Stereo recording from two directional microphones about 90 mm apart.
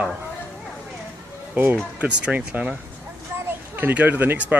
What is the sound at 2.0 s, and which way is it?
Speech, 15° right (ahead or behind).